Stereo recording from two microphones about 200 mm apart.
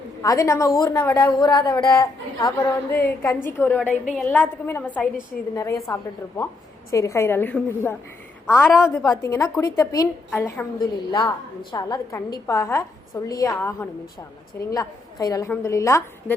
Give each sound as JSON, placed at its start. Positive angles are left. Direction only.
{"t": 0.2, "sound": "a woman's voice", "side_deg": 15}